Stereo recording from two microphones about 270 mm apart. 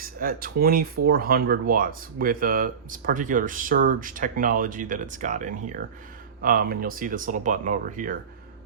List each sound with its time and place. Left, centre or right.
0.0 s speech: right